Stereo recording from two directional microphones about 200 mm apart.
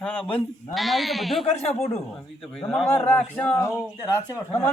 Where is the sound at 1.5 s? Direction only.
30° left (ahead or behind).